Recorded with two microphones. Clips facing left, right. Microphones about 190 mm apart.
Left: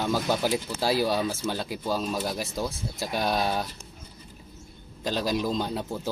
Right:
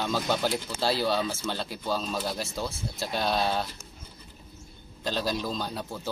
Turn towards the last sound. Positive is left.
turn(degrees=20)  # may be behind; listen again after turning